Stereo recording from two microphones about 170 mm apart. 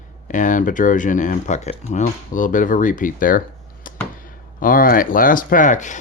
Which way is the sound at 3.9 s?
55° left (ahead or behind).